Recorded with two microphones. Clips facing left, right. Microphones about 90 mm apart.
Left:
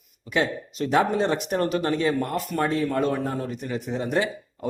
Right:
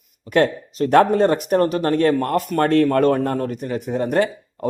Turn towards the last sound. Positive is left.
turn(degrees=-50)  # may be behind; listen again after turning